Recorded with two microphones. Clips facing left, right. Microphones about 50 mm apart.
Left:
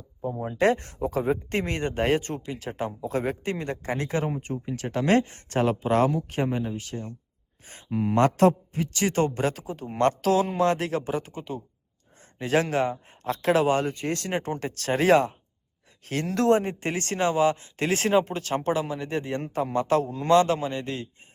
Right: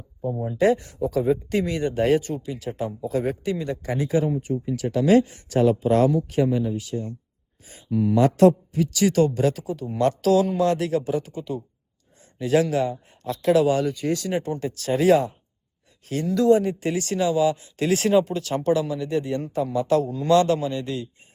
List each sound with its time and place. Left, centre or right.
0.3 s speech: left
0.5 s speech: left
7.6 s a sound: left
7.9 s speech: left